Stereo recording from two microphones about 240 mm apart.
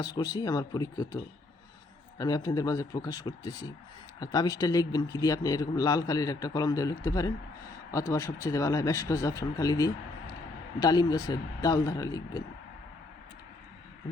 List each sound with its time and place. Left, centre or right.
0.0 s speech: centre